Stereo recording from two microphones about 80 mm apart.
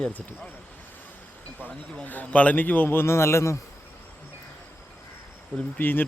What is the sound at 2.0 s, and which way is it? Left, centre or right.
Speech, centre.